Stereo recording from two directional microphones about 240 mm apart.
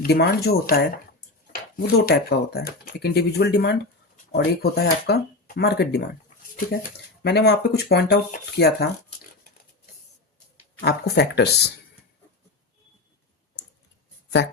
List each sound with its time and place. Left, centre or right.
0.0 s speech: left
2.0 s speech: left
7.2 s speech: left
10.8 s speech: left
14.4 s speech: left